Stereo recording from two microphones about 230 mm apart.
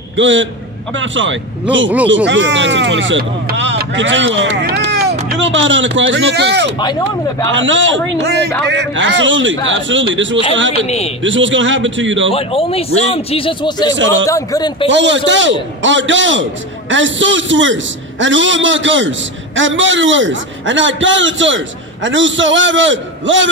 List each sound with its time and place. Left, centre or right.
0.2 s a man's voice: right
4.4 s a sound: right
5.4 s speech: right
6.8 s speech: centre
7.5 s a man's voice: right
12.3 s speech: left
13.9 s a man's voice: right
14.2 s speech: centre
14.9 s a man's voice: right